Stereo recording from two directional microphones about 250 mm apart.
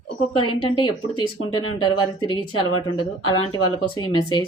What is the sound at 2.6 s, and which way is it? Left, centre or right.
Speech, left.